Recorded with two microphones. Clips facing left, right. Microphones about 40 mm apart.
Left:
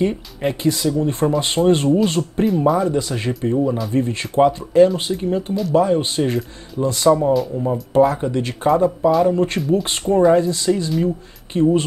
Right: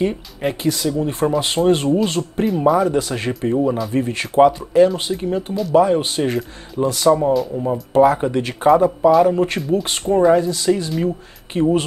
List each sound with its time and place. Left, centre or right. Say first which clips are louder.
0.0 s speech: even; centre
8.1 s speech: right 3 dB; right
8.4 s speech: right 1 dB; centre
11.5 s speech: left 1 dB; centre